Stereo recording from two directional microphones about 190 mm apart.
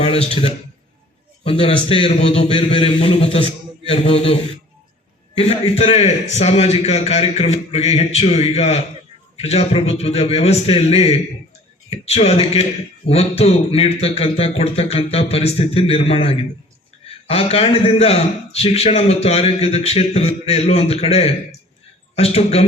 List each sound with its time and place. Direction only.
0.0 s a man's voice: 30° left (ahead or behind)
1.5 s a man's voice: 30° left (ahead or behind)
5.4 s a man's voice: 30° left (ahead or behind)